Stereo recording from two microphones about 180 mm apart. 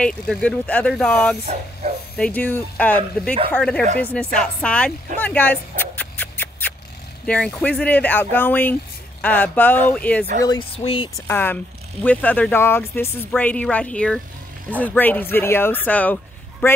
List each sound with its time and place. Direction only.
0.0 s speech: 5° left (ahead or behind)
1.4 s speech: 35° right (ahead or behind)
2.1 s speech: 5° left (ahead or behind)
10.7 s speech: 30° left (ahead or behind)
11.1 s speech: 10° left (ahead or behind)